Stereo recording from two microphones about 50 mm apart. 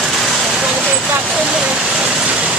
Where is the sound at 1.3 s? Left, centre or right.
Centre.